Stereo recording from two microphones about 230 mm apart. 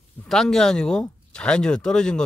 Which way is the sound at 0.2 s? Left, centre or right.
Centre.